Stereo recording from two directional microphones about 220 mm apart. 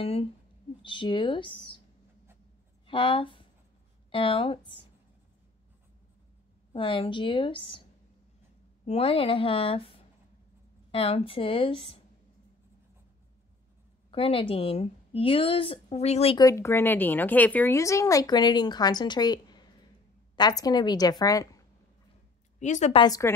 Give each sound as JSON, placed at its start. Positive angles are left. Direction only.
{"t": 0.0, "sound": "a woman's voice", "side_deg": 25}
{"t": 2.9, "sound": "a woman's voice", "side_deg": 25}
{"t": 6.7, "sound": "a woman's voice", "side_deg": 25}
{"t": 8.8, "sound": "a woman's voice", "side_deg": 25}
{"t": 14.1, "sound": "a woman's voice", "side_deg": 25}
{"t": 16.4, "sound": "a woman's voice", "side_deg": 10}
{"t": 22.6, "sound": "a woman's voice", "side_deg": 35}
{"t": 23.0, "sound": "a woman's voice", "side_deg": 15}